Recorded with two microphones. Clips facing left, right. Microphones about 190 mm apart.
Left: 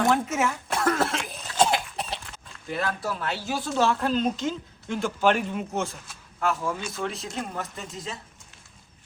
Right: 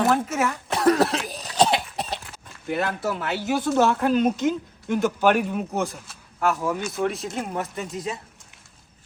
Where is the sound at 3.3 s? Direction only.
60° right (ahead or behind).